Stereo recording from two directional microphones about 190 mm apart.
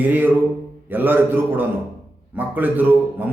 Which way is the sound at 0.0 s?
10° right (ahead or behind).